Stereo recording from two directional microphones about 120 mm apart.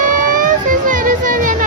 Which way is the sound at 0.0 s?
90° right.